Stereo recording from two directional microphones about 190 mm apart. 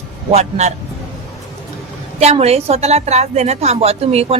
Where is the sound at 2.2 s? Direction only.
35° right (ahead or behind).